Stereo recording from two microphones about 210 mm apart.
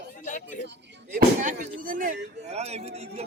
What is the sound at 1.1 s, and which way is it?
Speech, 40° right (ahead or behind).